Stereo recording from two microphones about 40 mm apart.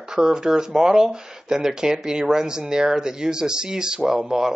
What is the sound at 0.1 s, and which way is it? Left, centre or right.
Speech, centre.